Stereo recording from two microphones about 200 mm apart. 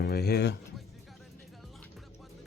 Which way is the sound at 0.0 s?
50° left (ahead or behind).